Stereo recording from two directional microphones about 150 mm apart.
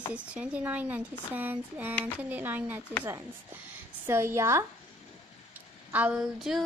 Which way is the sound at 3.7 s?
15° right (ahead or behind).